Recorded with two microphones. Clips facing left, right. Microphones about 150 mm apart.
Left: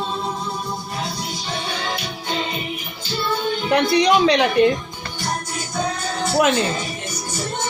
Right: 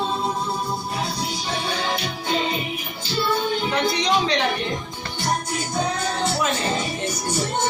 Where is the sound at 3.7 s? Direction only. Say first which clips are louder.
Left 8 dB; 65° left (ahead or behind).